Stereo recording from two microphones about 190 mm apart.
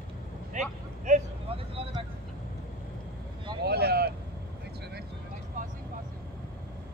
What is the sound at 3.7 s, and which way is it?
Vehicle, 55° right (ahead or behind).